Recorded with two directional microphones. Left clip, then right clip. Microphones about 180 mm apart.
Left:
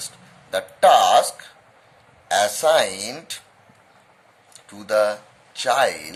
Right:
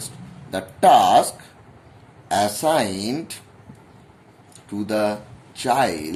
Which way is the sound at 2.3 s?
25° left (ahead or behind).